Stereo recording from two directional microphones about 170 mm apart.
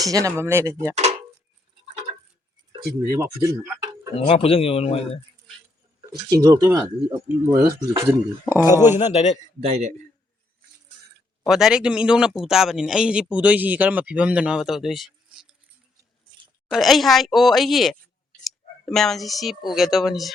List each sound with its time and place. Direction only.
0.0 s speech: 20° right (ahead or behind)
0.9 s dishes: 40° right (ahead or behind)
3.2 s speech: 15° right (ahead or behind)
4.1 s speech: 35° left (ahead or behind)
6.0 s speech: 25° right (ahead or behind)
9.0 s speech: 40° left (ahead or behind)
9.6 s speech: 40° right (ahead or behind)
11.4 s speech: centre (ahead or behind)
16.6 s speech: centre (ahead or behind)